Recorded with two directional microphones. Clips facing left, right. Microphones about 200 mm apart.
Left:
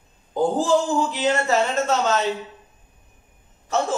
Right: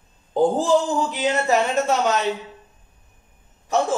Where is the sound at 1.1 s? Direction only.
15° right (ahead or behind).